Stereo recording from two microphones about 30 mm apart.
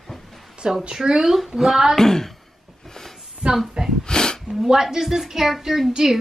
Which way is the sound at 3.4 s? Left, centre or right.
Right.